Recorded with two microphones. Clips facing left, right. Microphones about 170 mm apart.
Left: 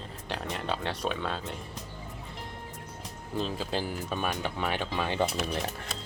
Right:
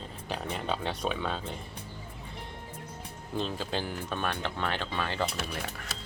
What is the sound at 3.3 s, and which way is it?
Speech, 5° left (ahead or behind).